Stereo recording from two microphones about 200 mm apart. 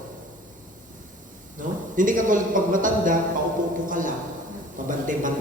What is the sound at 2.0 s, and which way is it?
A man's voice, 40° right (ahead or behind).